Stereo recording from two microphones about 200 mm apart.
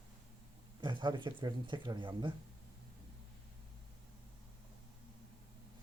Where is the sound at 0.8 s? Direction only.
25° right (ahead or behind).